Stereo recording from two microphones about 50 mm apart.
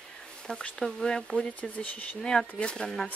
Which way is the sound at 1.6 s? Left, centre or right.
Left.